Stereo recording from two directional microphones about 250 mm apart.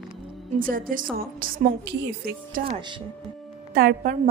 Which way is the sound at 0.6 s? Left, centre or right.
Right.